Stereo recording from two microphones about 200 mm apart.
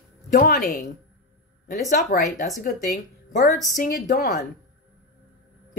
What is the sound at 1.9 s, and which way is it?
Speech, 40° left (ahead or behind).